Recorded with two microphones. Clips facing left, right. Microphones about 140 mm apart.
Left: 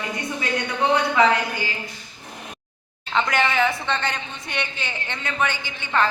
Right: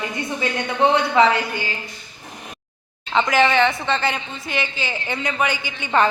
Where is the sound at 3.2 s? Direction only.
Centre (ahead or behind).